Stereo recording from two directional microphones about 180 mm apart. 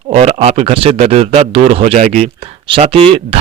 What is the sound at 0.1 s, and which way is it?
Speech, 35° right (ahead or behind).